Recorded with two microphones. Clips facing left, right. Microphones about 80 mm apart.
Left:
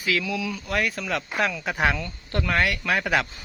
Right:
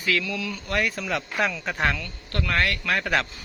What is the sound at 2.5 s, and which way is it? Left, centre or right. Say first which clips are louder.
Speech: left 1 dB; centre.